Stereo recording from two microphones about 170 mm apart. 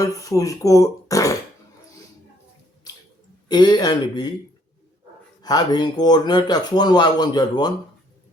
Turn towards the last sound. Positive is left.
turn(degrees=25)  # may be behind; listen again after turning